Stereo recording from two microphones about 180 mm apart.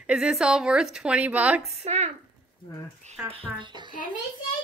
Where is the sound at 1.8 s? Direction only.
35° right (ahead or behind).